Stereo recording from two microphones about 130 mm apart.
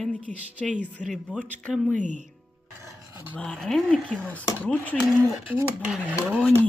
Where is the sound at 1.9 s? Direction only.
70° right (ahead or behind).